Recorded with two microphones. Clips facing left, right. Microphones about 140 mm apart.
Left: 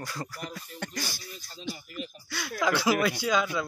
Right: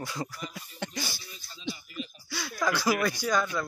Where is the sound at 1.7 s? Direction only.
55° left (ahead or behind).